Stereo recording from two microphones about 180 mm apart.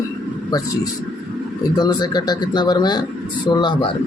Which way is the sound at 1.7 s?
25° left (ahead or behind).